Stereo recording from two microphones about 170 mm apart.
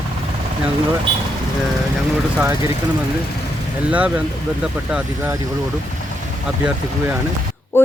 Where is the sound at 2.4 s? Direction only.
15° right (ahead or behind).